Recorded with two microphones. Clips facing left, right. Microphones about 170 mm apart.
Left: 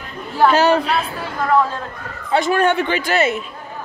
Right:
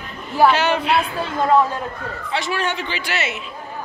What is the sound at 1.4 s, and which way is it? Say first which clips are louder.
Speech: even; 20° right (ahead or behind).